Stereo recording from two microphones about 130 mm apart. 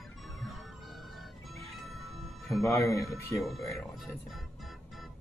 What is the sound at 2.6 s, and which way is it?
Speech, 25° left (ahead or behind).